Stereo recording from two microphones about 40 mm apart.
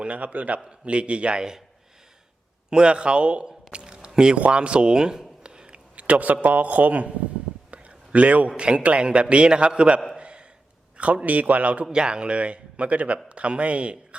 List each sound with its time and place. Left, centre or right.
0.0 s a man's voice: right
0.9 s a man's voice: right
2.6 s a man's voice: right
3.4 s a sound: right
4.4 s a man's voice: right
5.4 s a sound: right
6.0 s a man's voice: right
7.7 s a sound: right
8.8 s a man's voice: right
10.2 s a sound: right
10.9 s a man's voice: right
11.9 s a man's voice: right